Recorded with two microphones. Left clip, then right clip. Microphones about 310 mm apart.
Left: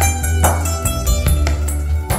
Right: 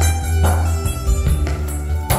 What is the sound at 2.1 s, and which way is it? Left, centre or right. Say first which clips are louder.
Music: right 2 dB; centre.